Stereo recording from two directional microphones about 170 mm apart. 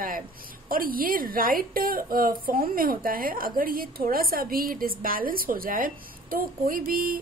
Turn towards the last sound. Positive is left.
turn(degrees=-55)  # may be behind; listen again after turning